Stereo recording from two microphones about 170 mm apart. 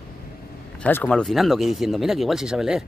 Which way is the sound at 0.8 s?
10° left (ahead or behind).